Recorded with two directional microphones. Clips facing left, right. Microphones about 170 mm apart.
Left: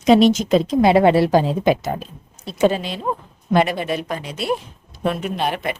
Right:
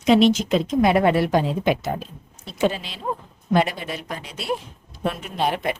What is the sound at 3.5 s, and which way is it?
Speech, 60° left (ahead or behind).